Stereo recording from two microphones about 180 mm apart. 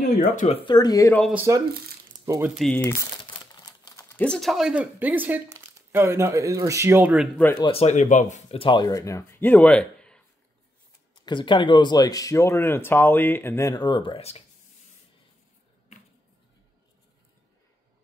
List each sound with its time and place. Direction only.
0.5 s speech: 30° left (ahead or behind)
0.7 s speech: 20° left (ahead or behind)
1.3 s speech: 15° right (ahead or behind)
2.5 s speech: centre (ahead or behind)
3.3 s a sound: 20° left (ahead or behind); by 5.7 s 10° right (ahead or behind)
5.8 s speech: 15° right (ahead or behind)
7.3 s speech: 10° left (ahead or behind)
7.6 s speech: 35° left (ahead or behind); by 10.2 s 5° left (ahead or behind)
11.2 s speech: 25° left (ahead or behind)